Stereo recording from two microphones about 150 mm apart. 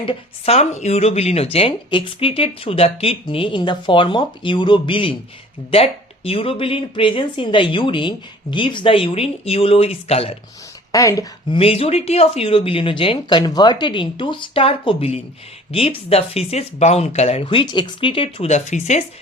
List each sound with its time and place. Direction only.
0.0 s speech: 40° left (ahead or behind)
10.9 s speech: 20° left (ahead or behind)
11.5 s speech: 40° left (ahead or behind)